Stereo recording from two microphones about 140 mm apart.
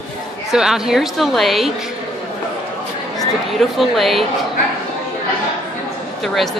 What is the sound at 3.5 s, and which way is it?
Speech, centre (ahead or behind).